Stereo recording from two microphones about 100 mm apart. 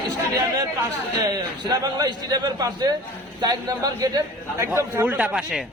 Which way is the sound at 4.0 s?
35° right (ahead or behind).